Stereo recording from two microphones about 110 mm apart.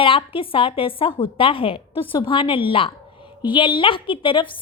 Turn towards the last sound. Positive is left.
turn(degrees=50)  # may be behind; listen again after turning